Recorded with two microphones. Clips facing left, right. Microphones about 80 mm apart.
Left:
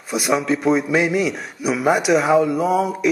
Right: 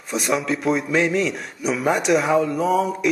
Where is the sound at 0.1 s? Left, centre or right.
Centre.